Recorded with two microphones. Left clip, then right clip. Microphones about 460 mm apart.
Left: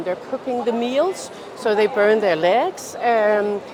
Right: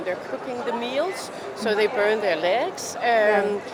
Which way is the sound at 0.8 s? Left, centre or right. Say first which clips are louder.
Left 5 dB; left.